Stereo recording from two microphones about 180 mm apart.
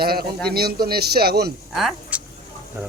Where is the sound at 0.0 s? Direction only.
60° right (ahead or behind).